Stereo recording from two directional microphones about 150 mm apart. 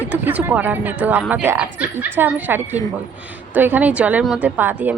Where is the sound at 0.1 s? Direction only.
10° right (ahead or behind).